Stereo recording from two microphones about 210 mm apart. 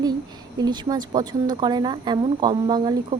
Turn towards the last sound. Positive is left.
turn(degrees=-20)  # may be behind; listen again after turning